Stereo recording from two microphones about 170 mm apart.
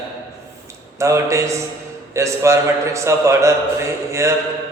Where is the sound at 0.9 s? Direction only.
15° right (ahead or behind).